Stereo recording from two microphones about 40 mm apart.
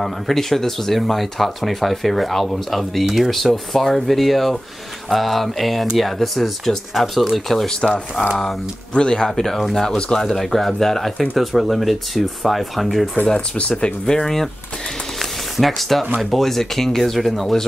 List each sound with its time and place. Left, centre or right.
0.0 s speech: centre
8.9 s speech: centre
9.3 s speech: centre
9.8 s speech: centre
13.6 s speech: left; by 14.5 s centre
15.5 s speech: centre